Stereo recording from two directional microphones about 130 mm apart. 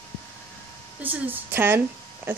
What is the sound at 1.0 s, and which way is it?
Speech, 15° right (ahead or behind).